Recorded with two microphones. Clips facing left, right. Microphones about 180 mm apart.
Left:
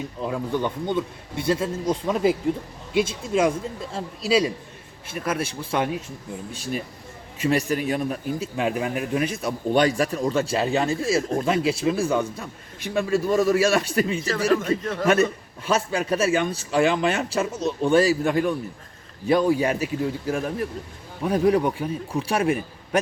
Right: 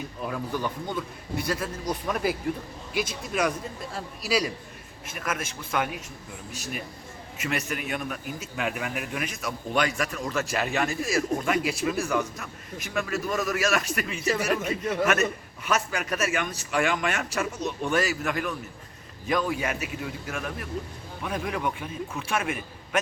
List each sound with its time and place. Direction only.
0.2 s a man's voice: 20° left (ahead or behind)
14.6 s a man's voice: 10° right (ahead or behind)
15.0 s a man's voice: 30° left (ahead or behind)